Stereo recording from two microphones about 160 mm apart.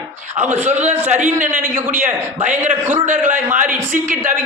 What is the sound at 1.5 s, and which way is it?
Speech, 15° right (ahead or behind).